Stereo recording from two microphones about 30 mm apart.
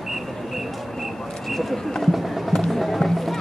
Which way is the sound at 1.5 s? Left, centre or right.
Centre.